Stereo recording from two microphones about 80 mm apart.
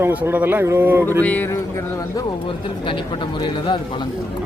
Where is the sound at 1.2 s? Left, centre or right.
Left.